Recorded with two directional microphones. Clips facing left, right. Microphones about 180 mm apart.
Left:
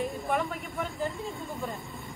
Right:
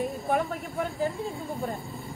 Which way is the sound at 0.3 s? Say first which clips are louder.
Right 5 dB; 40° right (ahead or behind).